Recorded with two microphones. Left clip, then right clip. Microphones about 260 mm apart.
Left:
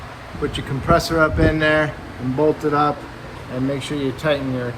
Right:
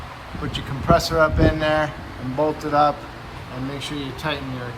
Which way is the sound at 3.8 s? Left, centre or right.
Centre.